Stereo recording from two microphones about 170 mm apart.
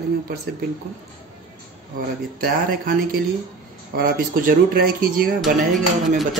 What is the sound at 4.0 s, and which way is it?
Speech, 60° right (ahead or behind).